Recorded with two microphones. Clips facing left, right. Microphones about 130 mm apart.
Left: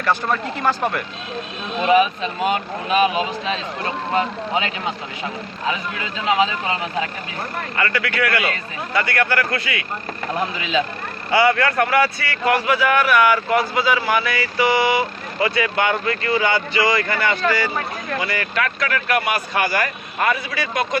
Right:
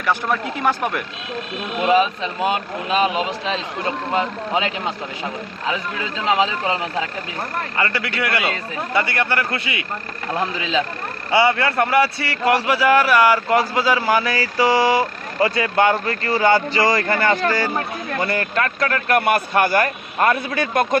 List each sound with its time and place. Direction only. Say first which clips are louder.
0.0 s speech: even; 10° right (ahead or behind)
1.9 s a man's voice: left 1 dB; 25° right (ahead or behind)
6.2 s a man's voice: even; 25° right (ahead or behind)
7.8 s a man's voice: left 2 dB; 25° right (ahead or behind)
11.3 s speech: even; 25° right (ahead or behind); by 20.8 s 50° right (ahead or behind)